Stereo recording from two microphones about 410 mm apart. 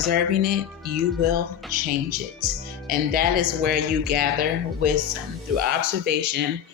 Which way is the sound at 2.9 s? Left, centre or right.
Right.